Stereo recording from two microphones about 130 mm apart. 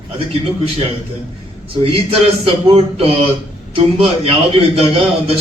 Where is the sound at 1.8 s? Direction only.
50° right (ahead or behind).